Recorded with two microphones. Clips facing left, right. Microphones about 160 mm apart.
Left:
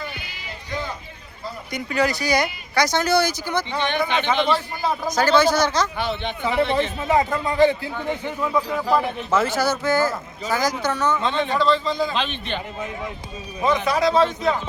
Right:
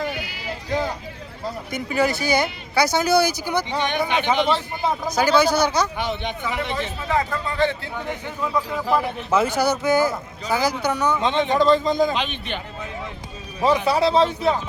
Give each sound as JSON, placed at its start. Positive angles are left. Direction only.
{"t": 0.4, "sound": "sheep", "side_deg": -80}
{"t": 1.7, "sound": "a man's voice", "side_deg": -5}
{"t": 5.0, "sound": "speech", "side_deg": -10}
{"t": 7.1, "sound": "a man's voice", "side_deg": 20}
{"t": 8.4, "sound": "speech", "side_deg": 0}
{"t": 9.0, "sound": "speech", "side_deg": -15}
{"t": 11.5, "sound": "a man's voice", "side_deg": -45}
{"t": 12.1, "sound": "speech", "side_deg": -15}
{"t": 13.8, "sound": "a man's voice", "side_deg": -30}